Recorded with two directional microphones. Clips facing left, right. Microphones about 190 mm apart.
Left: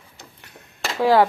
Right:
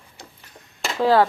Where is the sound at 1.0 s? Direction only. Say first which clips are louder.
Left 1 dB; 15° left (ahead or behind).